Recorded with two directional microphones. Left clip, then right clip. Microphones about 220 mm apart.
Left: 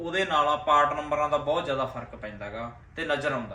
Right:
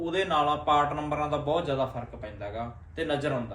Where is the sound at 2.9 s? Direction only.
Centre (ahead or behind).